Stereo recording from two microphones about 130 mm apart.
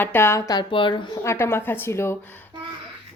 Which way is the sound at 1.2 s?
20° left (ahead or behind).